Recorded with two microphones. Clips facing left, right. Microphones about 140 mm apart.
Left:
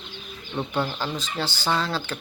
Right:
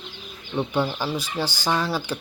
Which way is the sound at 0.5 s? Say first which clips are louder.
Right 3 dB; 10° right (ahead or behind).